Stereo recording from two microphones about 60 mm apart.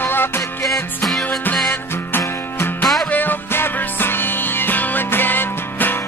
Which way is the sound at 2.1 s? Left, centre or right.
Left.